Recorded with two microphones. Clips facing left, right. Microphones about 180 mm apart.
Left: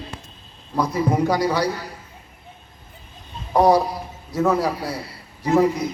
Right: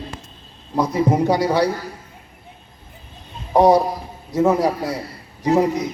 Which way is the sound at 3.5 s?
20° right (ahead or behind).